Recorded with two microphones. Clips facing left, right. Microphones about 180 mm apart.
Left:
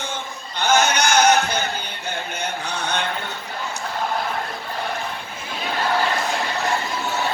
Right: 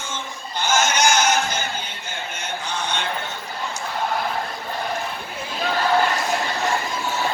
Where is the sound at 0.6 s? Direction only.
60° left (ahead or behind).